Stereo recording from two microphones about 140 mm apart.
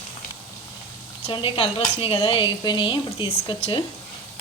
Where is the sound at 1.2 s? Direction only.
40° left (ahead or behind).